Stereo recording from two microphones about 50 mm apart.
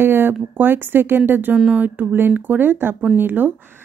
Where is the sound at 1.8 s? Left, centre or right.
Right.